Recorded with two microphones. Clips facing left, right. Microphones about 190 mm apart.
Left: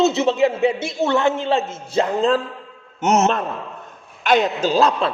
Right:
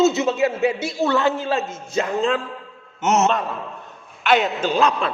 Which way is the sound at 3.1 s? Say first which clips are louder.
Left 1 dB; 50° left (ahead or behind).